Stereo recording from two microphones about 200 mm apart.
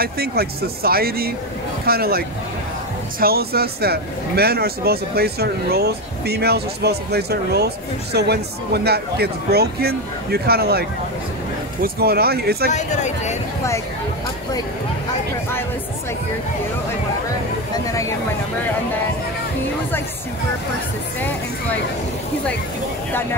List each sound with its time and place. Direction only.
0.0 s speech: 50° right (ahead or behind)
12.7 s speech: 35° left (ahead or behind)